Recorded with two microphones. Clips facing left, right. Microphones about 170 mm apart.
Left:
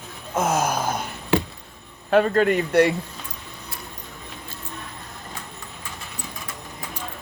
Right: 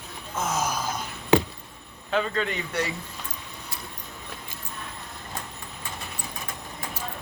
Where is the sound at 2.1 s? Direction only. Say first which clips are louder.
Left 9 dB; 55° left (ahead or behind).